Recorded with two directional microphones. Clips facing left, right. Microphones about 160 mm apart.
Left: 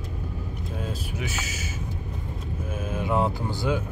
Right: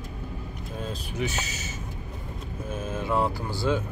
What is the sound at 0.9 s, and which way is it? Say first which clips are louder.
Speech: right 1 dB; 10° left (ahead or behind).